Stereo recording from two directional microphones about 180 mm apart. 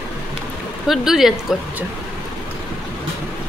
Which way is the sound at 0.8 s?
Centre (ahead or behind).